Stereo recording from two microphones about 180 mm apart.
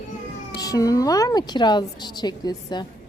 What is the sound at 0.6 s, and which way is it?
A woman's voice, 20° left (ahead or behind).